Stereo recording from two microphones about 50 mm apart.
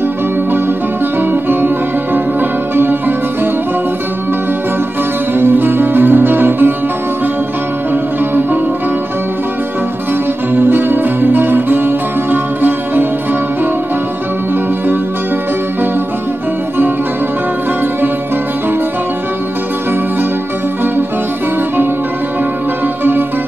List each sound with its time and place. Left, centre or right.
1.3 s music: right
2.7 s music: right
5.3 s music: right
7.9 s music: right
10.5 s music: right